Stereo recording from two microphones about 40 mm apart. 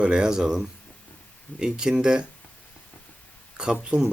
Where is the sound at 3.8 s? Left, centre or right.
Right.